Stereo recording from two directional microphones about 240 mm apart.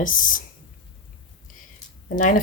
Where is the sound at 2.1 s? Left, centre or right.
Left.